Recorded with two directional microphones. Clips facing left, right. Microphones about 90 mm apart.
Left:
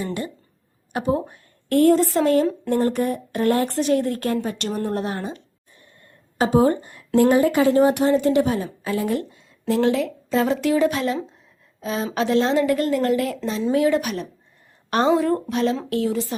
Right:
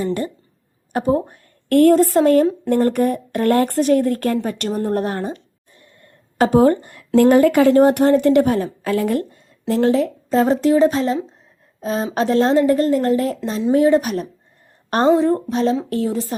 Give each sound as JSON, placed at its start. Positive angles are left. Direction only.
{"t": 0.9, "sound": "a woman's voice", "side_deg": -40}
{"t": 1.3, "sound": "speech", "side_deg": -55}
{"t": 2.6, "sound": "a woman's voice", "side_deg": -55}
{"t": 6.4, "sound": "a woman's voice", "side_deg": -60}
{"t": 14.8, "sound": "a sound", "side_deg": -40}
{"t": 15.4, "sound": "a woman's voice", "side_deg": -35}